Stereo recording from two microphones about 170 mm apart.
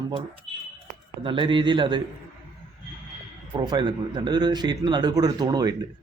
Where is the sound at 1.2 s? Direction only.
30° right (ahead or behind).